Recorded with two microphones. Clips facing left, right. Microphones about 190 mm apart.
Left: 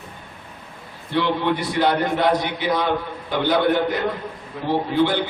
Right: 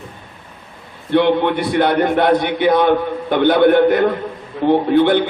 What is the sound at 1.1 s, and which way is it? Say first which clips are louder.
A man's voice: right 7 dB; 60° right (ahead or behind).